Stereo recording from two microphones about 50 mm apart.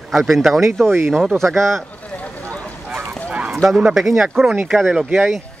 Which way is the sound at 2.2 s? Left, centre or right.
Left.